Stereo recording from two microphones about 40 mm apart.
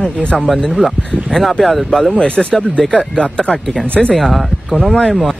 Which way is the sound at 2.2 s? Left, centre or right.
Left.